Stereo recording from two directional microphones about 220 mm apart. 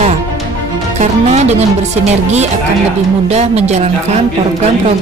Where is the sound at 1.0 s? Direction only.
30° right (ahead or behind).